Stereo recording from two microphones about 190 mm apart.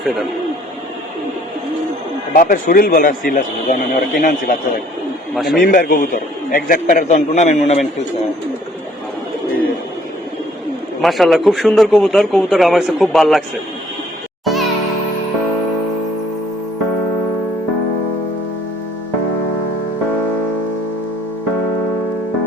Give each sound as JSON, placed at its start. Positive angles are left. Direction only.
{"t": 0.0, "sound": "a man's voice", "side_deg": 0}
{"t": 2.3, "sound": "a man's voice", "side_deg": 50}
{"t": 5.3, "sound": "a man's voice", "side_deg": 0}
{"t": 5.5, "sound": "a man's voice", "side_deg": 50}
{"t": 11.0, "sound": "a man's voice", "side_deg": 0}
{"t": 14.4, "sound": "music", "side_deg": 0}